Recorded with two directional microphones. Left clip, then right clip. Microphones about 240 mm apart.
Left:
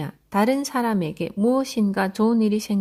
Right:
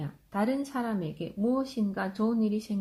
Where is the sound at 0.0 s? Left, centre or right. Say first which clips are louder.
Left 9 dB; left.